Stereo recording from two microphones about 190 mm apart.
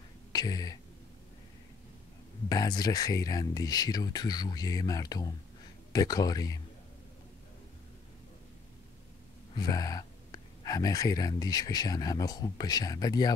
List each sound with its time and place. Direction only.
0.3 s speech: 20° left (ahead or behind)
2.5 s speech: 20° left (ahead or behind)
9.6 s speech: 20° left (ahead or behind)